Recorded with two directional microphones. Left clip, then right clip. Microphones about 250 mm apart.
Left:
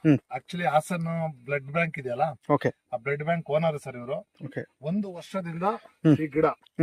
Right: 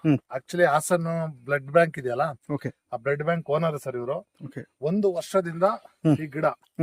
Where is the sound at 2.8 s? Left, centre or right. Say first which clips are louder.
Right 2 dB; centre.